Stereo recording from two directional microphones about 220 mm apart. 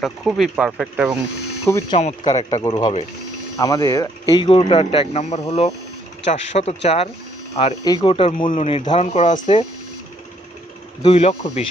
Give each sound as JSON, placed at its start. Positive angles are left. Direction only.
{"t": 0.0, "sound": "speech", "side_deg": 0}
{"t": 2.0, "sound": "speech", "side_deg": 30}
{"t": 2.3, "sound": "speech", "side_deg": 20}
{"t": 11.0, "sound": "speech", "side_deg": 25}